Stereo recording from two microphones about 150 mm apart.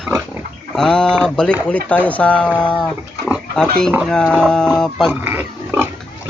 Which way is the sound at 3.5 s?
5° left (ahead or behind).